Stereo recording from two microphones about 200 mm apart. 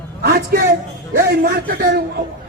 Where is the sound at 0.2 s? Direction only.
50° right (ahead or behind).